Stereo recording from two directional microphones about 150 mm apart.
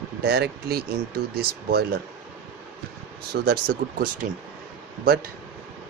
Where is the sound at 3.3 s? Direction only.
90° right.